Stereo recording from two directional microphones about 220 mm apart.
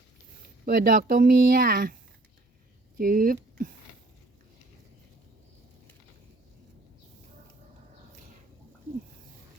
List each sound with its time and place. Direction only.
0.6 s speech: 45° right (ahead or behind)
3.0 s speech: 40° right (ahead or behind)